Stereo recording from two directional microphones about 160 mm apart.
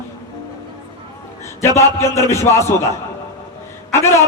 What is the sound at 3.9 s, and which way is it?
Speech, 15° left (ahead or behind).